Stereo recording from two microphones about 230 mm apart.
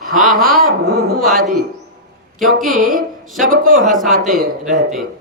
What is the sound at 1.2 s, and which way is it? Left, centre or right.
Speech, centre.